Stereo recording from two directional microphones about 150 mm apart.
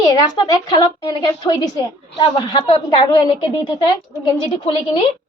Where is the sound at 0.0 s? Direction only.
25° left (ahead or behind).